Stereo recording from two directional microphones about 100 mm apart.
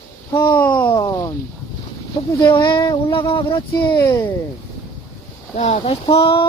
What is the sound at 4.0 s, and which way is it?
Speech, 35° left (ahead or behind).